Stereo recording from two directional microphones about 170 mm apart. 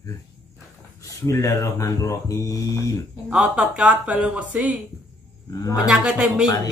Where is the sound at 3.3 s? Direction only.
5° right (ahead or behind).